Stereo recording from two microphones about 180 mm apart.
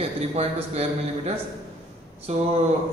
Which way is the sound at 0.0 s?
35° right (ahead or behind).